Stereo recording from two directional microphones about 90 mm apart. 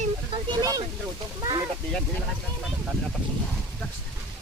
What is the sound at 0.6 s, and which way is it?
Speech, 40° right (ahead or behind).